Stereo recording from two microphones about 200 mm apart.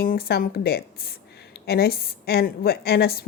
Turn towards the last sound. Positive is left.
turn(degrees=50)  # may be behind; listen again after turning